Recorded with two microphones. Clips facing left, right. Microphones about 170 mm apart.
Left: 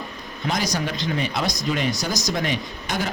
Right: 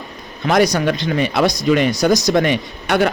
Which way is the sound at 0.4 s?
65° right (ahead or behind).